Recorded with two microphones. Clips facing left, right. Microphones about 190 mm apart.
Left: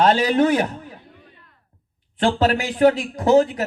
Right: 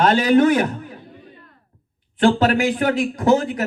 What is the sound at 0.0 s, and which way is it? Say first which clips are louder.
Speech: right 2 dB; 30° left (ahead or behind).